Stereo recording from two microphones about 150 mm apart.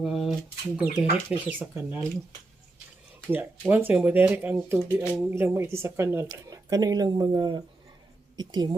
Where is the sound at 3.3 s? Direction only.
10° right (ahead or behind).